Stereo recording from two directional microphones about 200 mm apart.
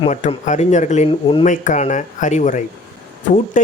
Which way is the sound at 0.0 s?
35° left (ahead or behind).